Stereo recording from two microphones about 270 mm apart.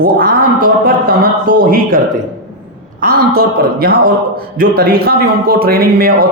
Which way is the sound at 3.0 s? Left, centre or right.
Right.